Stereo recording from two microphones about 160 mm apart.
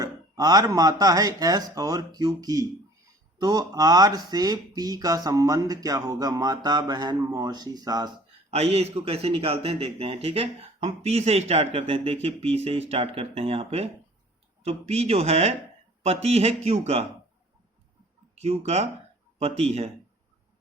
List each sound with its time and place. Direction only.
0.0 s speech: 25° right (ahead or behind)
8.4 s speech: 40° right (ahead or behind)
18.3 s speech: 40° right (ahead or behind)